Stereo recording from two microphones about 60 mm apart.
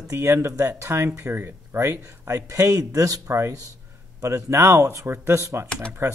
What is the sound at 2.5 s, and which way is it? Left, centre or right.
Speech, right.